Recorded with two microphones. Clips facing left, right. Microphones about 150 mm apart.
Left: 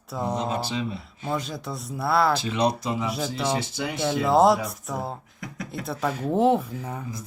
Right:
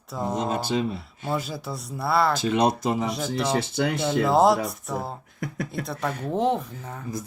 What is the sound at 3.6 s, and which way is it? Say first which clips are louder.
Speech: right 5 dB; 55° right (ahead or behind).